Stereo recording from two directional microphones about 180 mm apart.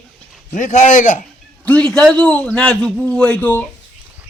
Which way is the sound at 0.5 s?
40° left (ahead or behind).